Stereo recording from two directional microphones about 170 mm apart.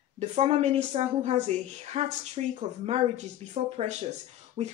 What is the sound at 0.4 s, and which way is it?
A woman's voice, 40° right (ahead or behind).